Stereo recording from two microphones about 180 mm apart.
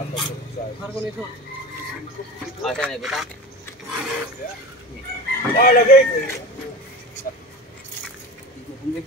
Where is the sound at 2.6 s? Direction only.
5° left (ahead or behind).